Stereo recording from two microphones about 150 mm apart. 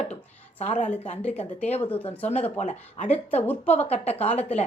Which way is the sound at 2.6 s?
50° left (ahead or behind).